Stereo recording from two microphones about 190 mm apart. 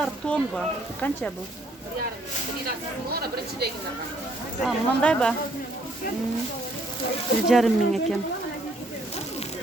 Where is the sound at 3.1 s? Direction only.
55° right (ahead or behind).